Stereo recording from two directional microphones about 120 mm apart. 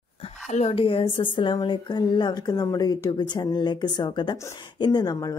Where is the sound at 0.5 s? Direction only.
60° left (ahead or behind); by 5.1 s 35° left (ahead or behind).